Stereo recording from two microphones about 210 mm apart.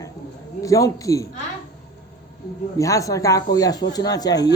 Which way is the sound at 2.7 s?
15° left (ahead or behind).